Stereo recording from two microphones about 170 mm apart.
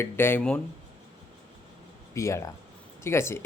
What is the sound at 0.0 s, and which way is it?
Speech, 15° left (ahead or behind).